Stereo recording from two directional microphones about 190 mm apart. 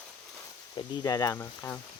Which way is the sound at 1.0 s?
15° left (ahead or behind).